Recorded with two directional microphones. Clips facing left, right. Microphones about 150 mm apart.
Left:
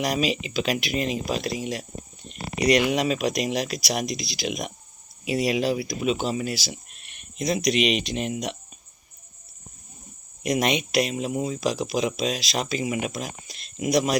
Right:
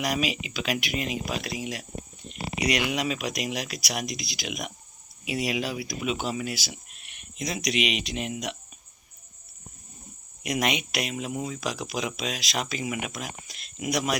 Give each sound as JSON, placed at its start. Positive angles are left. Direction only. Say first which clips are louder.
{"t": 0.0, "sound": "speech", "louder": "left 3 dB", "side_deg": 35}
{"t": 10.4, "sound": "speech", "louder": "left 4 dB", "side_deg": 30}